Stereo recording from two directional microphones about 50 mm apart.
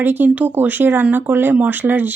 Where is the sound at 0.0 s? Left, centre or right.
Right.